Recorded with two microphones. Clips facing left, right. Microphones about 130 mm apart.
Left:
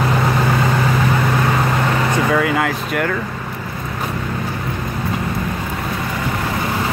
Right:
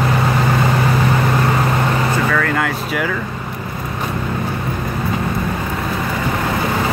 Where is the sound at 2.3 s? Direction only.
5° left (ahead or behind).